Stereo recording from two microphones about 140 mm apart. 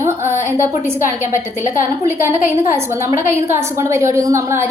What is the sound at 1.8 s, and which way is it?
A woman's voice, 20° right (ahead or behind).